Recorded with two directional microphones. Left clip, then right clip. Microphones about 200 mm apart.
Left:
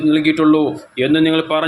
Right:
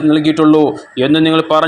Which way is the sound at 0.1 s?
20° right (ahead or behind).